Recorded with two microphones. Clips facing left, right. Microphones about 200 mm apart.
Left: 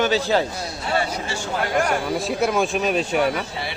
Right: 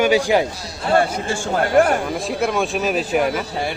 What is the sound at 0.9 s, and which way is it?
Speech, 50° right (ahead or behind).